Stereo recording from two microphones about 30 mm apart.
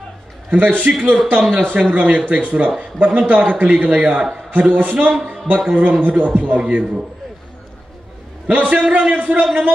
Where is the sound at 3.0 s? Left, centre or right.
Right.